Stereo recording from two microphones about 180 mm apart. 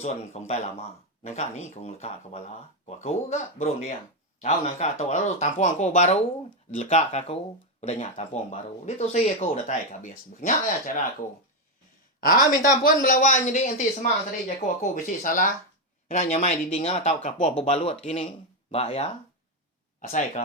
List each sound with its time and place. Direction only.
0.0 s speech: 40° left (ahead or behind)
12.2 s speech: 50° left (ahead or behind)